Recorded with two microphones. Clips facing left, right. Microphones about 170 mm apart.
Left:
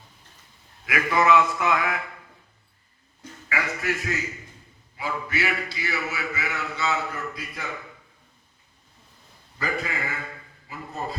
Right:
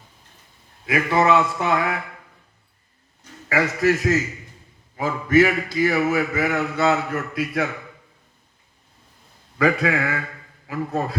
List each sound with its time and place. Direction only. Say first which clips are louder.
0.9 s a man's voice: right 3 dB; 25° right (ahead or behind)
3.5 s a man's voice: right 9 dB; 40° right (ahead or behind); by 7.7 s 75° right (ahead or behind)
9.6 s a man's voice: right 10 dB; 85° right